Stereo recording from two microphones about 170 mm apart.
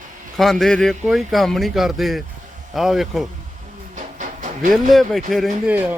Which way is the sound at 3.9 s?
50° right (ahead or behind).